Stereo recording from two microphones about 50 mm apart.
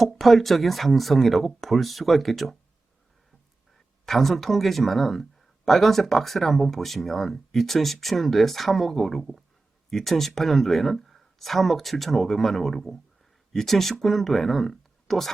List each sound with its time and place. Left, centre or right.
0.0 s speech: centre
4.0 s speech: centre